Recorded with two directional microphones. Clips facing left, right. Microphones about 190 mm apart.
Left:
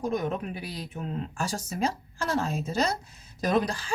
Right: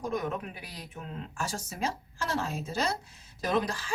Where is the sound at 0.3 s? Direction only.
30° left (ahead or behind).